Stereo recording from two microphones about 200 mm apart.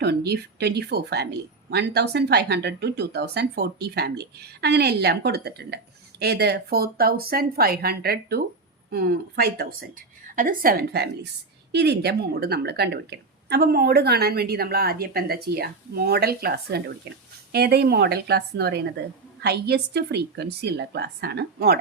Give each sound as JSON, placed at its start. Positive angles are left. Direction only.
{"t": 0.0, "sound": "a woman's voice", "side_deg": -55}